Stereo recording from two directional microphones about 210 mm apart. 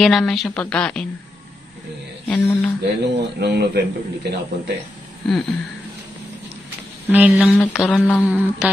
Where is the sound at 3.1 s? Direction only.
55° right (ahead or behind).